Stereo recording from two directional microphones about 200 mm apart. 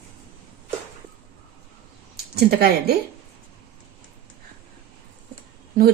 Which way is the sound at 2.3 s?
50° right (ahead or behind).